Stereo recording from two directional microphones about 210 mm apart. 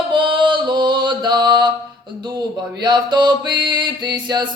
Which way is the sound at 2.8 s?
20° right (ahead or behind).